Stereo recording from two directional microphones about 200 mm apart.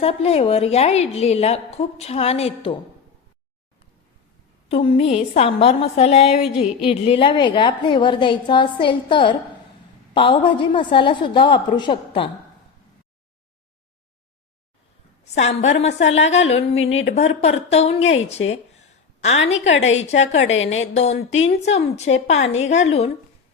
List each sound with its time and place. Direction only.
0.0 s a woman's voice: 30° left (ahead or behind)
4.7 s a woman's voice: 30° left (ahead or behind)
15.2 s a woman's voice: 35° left (ahead or behind)
19.7 s a woman's voice: 70° left (ahead or behind)
20.1 s a woman's voice: 35° left (ahead or behind)
20.4 s a woman's voice: 70° left (ahead or behind)
20.7 s a woman's voice: 35° left (ahead or behind)